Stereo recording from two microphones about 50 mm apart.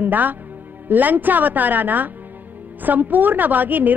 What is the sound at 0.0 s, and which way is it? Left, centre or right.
A man's voice, right.